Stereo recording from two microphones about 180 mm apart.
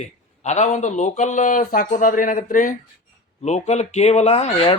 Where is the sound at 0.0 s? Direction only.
40° left (ahead or behind).